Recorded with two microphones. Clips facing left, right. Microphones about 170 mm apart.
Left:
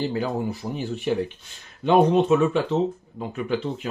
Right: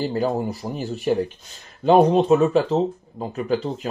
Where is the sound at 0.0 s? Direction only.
40° right (ahead or behind).